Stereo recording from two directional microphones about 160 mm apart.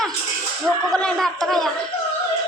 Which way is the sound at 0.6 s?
5° left (ahead or behind).